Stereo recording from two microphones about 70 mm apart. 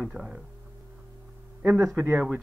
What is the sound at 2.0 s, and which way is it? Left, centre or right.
Speech, right.